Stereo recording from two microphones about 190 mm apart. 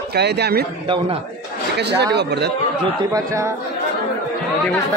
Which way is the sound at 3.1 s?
15° right (ahead or behind).